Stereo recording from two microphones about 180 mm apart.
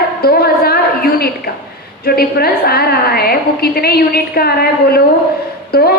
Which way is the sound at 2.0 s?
60° left (ahead or behind).